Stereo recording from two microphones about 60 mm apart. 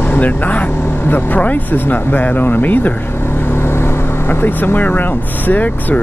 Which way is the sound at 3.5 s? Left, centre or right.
Left.